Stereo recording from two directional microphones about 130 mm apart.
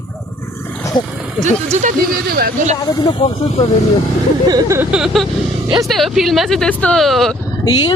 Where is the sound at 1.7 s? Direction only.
60° right (ahead or behind).